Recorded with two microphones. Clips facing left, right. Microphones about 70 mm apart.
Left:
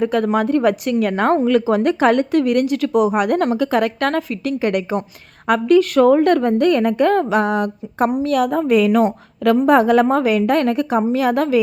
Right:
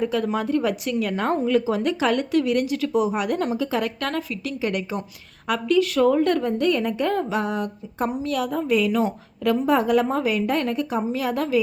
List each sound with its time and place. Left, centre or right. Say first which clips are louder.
0.0 s a woman's voice: left 6 dB; left